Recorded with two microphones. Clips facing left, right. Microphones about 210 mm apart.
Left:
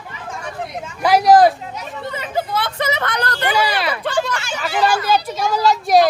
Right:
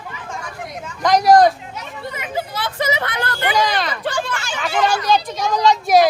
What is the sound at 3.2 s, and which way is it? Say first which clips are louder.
Speech: left 1 dB; 40° left (ahead or behind).